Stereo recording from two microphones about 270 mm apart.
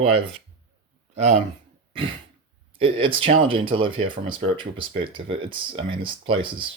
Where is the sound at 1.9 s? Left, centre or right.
Centre.